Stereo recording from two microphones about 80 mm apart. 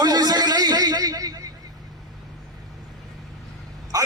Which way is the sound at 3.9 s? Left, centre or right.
Right.